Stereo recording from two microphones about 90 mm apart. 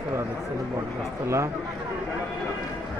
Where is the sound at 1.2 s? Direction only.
30° right (ahead or behind).